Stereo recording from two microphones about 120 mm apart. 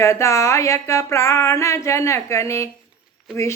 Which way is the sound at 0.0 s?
25° left (ahead or behind).